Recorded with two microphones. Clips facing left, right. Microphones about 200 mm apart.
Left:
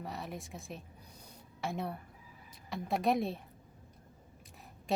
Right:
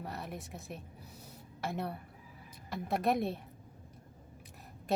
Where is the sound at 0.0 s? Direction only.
Centre (ahead or behind).